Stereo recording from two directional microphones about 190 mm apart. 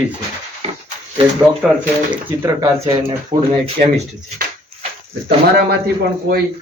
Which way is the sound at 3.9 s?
35° right (ahead or behind).